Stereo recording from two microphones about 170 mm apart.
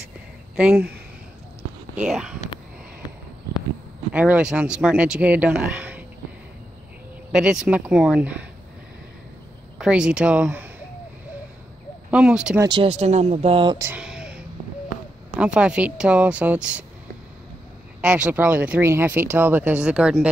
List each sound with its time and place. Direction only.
0.6 s speech: 5° right (ahead or behind)
2.0 s speech: centre (ahead or behind)
4.1 s speech: 10° right (ahead or behind)
7.3 s speech: 5° right (ahead or behind)
9.8 s speech: 5° right (ahead or behind)
12.1 s speech: 5° right (ahead or behind)
12.5 s speech: 30° right (ahead or behind)
13.7 s a sound: 10° right (ahead or behind)
15.3 s speech: 5° right (ahead or behind)
18.0 s speech: 5° right (ahead or behind)